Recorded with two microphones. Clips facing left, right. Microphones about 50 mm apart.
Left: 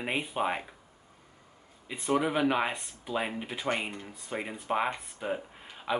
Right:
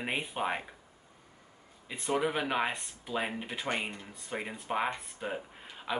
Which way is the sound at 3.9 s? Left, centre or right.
Centre.